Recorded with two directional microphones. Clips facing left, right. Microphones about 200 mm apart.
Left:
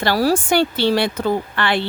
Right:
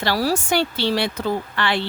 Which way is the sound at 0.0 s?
50° left (ahead or behind).